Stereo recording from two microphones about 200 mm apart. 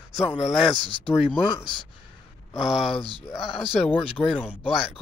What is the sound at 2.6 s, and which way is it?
Speech, centre (ahead or behind).